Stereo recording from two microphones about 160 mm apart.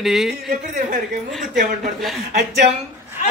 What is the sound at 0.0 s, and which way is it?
Speech, centre (ahead or behind).